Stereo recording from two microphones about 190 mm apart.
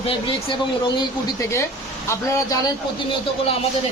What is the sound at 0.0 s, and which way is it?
Speech, 30° left (ahead or behind).